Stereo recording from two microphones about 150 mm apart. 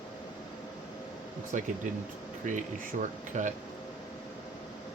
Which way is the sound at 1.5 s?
55° right (ahead or behind).